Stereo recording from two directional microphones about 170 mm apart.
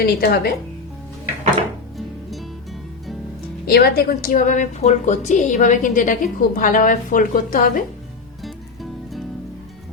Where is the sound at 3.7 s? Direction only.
70° left (ahead or behind).